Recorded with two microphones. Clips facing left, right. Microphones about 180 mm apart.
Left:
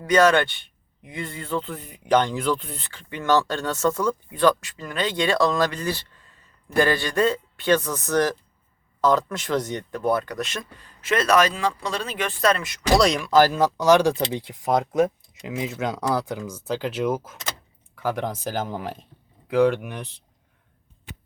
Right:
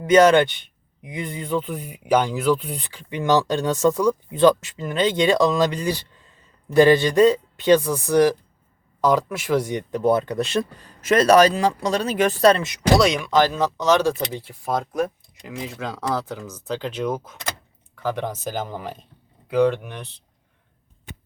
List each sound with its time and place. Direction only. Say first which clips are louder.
0.0 s speech: right 4 dB; 20° right (ahead or behind)
13.0 s speech: left 4 dB; centre (ahead or behind)
19.5 s speech: even; 10° left (ahead or behind)